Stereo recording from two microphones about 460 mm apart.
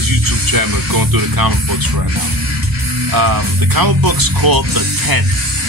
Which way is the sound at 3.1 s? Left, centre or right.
Right.